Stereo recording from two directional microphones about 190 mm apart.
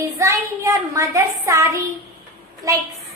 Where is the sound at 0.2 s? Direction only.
15° right (ahead or behind).